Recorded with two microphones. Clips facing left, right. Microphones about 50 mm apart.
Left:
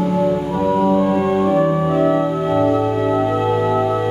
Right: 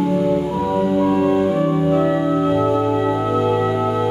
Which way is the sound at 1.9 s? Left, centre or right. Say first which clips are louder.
Left 1 dB; centre.